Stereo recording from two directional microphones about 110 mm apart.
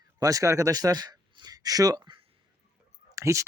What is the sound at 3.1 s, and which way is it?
Speech, 25° right (ahead or behind).